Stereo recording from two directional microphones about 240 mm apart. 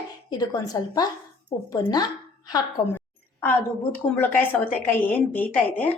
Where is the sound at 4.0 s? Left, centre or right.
Centre.